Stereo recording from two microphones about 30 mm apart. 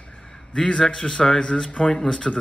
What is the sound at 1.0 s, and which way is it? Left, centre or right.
Speech, left.